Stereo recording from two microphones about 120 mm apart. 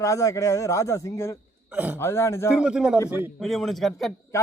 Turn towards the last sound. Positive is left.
turn(degrees=0)  # may be behind; listen again after turning